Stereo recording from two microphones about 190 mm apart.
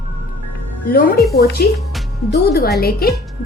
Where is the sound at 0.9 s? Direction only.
50° left (ahead or behind).